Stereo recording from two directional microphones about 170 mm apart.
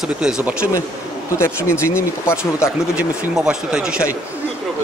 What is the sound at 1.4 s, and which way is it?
Speech, 15° left (ahead or behind).